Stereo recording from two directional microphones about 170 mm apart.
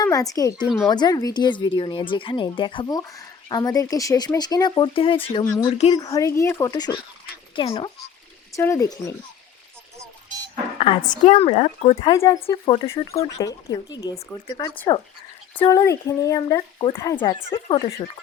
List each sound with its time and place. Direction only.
0.0 s a woman's voice: 20° left (ahead or behind)
8.5 s speech: 20° left (ahead or behind)
11.0 s a woman's voice: 50° left (ahead or behind)
11.3 s speech: 35° left (ahead or behind)
12.0 s speech: 20° left (ahead or behind)
12.6 s a woman's voice: 30° left (ahead or behind)
12.9 s a woman's voice: 15° left (ahead or behind)